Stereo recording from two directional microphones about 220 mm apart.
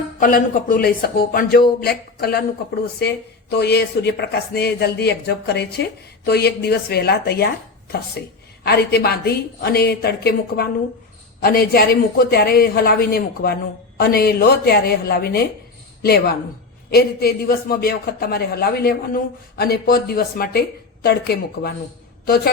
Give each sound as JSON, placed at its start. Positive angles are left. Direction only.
{"t": 0.2, "sound": "a man's voice", "side_deg": 40}